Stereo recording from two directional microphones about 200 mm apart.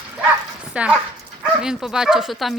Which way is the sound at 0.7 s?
5° right (ahead or behind).